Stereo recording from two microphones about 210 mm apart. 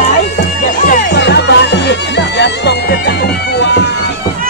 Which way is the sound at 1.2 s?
55° left (ahead or behind).